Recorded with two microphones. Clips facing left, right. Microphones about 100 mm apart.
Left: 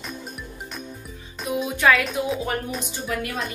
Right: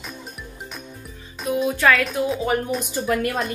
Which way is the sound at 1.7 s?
15° left (ahead or behind).